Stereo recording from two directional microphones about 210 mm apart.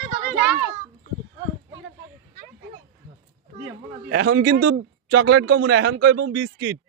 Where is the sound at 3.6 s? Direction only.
50° right (ahead or behind).